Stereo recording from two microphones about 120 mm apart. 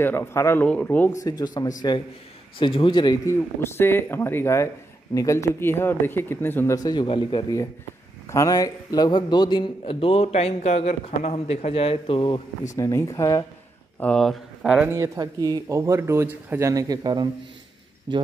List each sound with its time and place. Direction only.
0.0 s speech: 20° left (ahead or behind)
0.7 s speech: 10° left (ahead or behind)
1.1 s a man's voice: 35° left (ahead or behind)
2.6 s a man's voice: 45° left (ahead or behind)
3.3 s speech: 20° left (ahead or behind)
6.7 s a man's voice: 35° left (ahead or behind)
8.3 s a man's voice: 30° left (ahead or behind); by 12.4 s 45° left (ahead or behind)
12.7 s speech: 25° left (ahead or behind)
13.9 s speech: 10° left (ahead or behind)
14.9 s speech: 30° right (ahead or behind)